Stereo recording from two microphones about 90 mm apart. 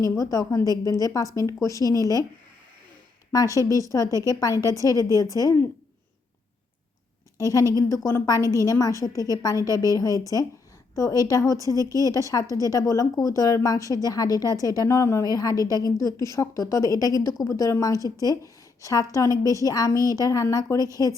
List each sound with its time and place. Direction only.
0.0 s speech: 40° left (ahead or behind)
3.3 s speech: 40° left (ahead or behind)
7.7 s speech: 40° left (ahead or behind)